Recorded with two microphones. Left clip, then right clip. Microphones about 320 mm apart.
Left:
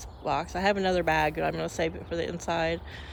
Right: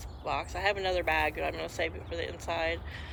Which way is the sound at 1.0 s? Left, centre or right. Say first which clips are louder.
Left 3 dB; left.